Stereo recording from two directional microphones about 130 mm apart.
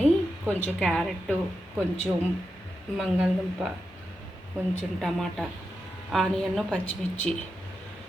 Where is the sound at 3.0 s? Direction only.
5° right (ahead or behind).